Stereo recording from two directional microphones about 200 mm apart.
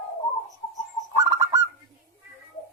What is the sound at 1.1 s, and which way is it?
Bird, 15° right (ahead or behind).